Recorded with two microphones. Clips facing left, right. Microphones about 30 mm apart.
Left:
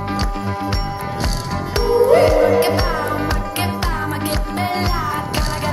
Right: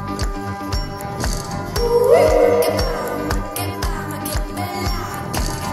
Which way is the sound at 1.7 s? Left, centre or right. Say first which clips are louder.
Even; left.